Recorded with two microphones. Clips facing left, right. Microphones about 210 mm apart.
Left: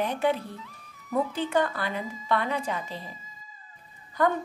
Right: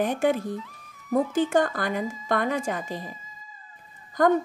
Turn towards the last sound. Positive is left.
turn(degrees=-45)  # may be behind; listen again after turning